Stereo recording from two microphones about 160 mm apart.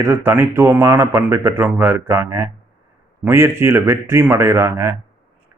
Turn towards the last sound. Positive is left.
turn(degrees=-15)  # may be behind; listen again after turning